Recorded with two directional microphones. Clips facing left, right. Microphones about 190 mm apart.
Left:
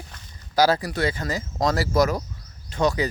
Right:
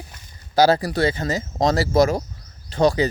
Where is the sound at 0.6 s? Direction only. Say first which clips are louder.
Right 4 dB; 30° right (ahead or behind).